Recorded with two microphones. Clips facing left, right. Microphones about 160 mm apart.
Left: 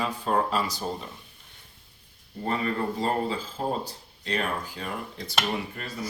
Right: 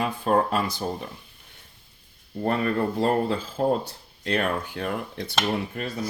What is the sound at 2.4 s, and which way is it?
Speech, 60° right (ahead or behind).